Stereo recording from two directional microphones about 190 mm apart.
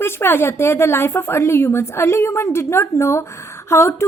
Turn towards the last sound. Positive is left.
turn(degrees=15)  # may be behind; listen again after turning